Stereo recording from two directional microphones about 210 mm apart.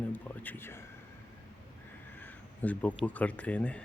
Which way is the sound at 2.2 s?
10° left (ahead or behind).